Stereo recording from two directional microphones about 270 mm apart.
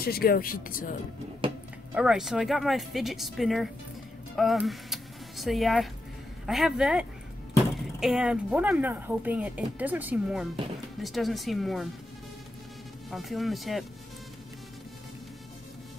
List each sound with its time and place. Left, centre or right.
0.0 s speech: left
2.0 s speech: centre
13.1 s speech: centre